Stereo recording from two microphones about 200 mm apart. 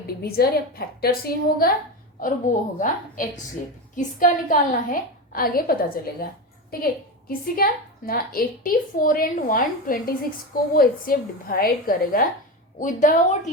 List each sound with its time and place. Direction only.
0.2 s a woman's voice: 50° left (ahead or behind)
7.3 s a woman's voice: 45° left (ahead or behind)